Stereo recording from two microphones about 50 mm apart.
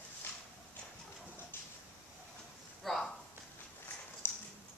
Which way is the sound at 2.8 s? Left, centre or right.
Centre.